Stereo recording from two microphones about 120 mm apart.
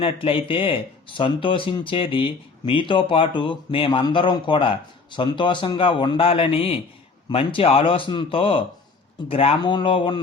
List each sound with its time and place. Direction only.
0.0 s speech: 50° left (ahead or behind)